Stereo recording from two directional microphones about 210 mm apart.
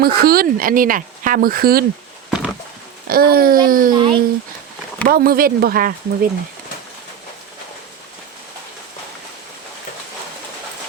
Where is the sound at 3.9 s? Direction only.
25° right (ahead or behind).